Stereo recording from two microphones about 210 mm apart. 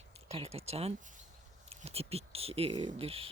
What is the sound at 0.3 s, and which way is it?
A woman's voice, 30° right (ahead or behind).